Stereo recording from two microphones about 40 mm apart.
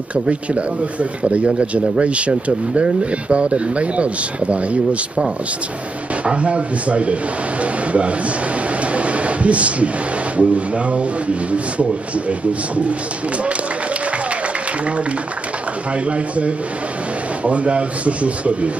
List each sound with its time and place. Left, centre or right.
0.1 s speech: right
6.2 s speech: right
16.1 s speech: right